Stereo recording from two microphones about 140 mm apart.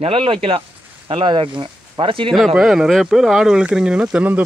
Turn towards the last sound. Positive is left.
turn(degrees=-10)  # may be behind; listen again after turning